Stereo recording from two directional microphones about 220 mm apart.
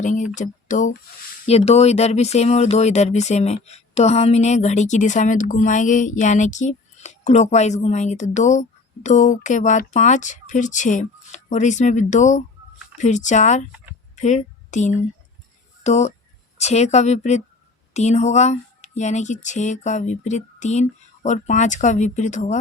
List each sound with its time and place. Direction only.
0.3 s speech: 35° left (ahead or behind)